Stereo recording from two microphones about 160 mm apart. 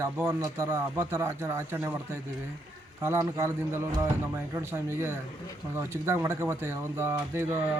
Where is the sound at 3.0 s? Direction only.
15° right (ahead or behind).